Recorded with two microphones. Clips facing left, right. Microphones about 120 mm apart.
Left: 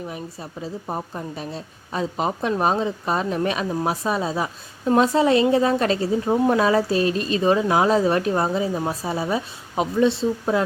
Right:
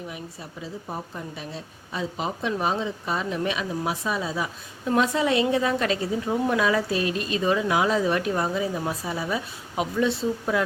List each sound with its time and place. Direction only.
0.6 s a woman's voice: 40° left (ahead or behind)